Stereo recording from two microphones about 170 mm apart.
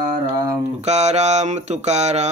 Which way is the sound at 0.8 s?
40° right (ahead or behind).